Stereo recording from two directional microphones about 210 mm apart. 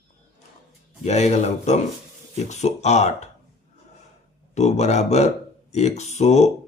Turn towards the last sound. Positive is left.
turn(degrees=30)  # may be behind; listen again after turning